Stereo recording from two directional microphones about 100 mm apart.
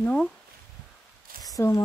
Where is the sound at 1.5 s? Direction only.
30° left (ahead or behind).